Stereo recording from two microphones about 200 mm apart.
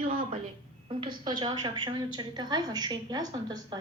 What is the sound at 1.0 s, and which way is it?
A woman's voice, 25° right (ahead or behind).